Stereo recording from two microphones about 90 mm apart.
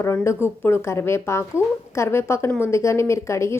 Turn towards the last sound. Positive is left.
turn(degrees=30)  # may be behind; listen again after turning